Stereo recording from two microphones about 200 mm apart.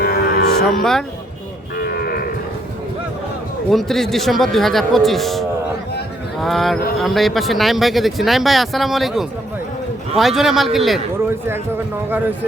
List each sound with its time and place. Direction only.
0.0 s music: 45° left (ahead or behind)
0.8 s speech: centre (ahead or behind)
1.8 s cattle: 50° left (ahead or behind)
3.7 s speech: centre (ahead or behind)
11.2 s speech: 10° right (ahead or behind)